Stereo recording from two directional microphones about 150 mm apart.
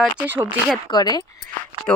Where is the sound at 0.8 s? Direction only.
30° left (ahead or behind).